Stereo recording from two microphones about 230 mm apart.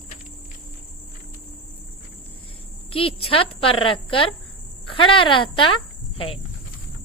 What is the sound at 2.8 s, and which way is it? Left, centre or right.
Speech, left.